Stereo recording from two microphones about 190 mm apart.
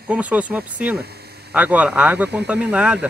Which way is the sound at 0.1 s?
5° right (ahead or behind).